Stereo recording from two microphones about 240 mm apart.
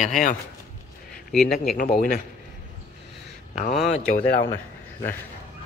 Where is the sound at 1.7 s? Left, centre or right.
Left.